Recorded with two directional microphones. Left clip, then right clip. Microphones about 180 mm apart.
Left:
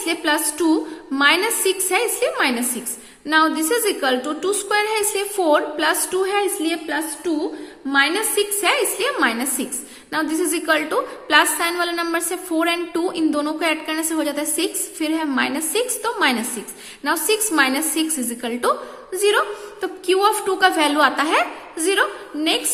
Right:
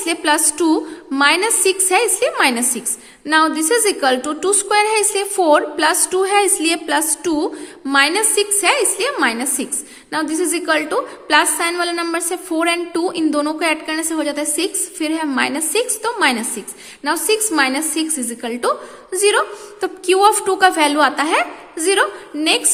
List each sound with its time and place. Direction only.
0.0 s a woman's voice: 20° right (ahead or behind); by 7.9 s 40° right (ahead or behind)
7.9 s a woman's voice: 25° right (ahead or behind)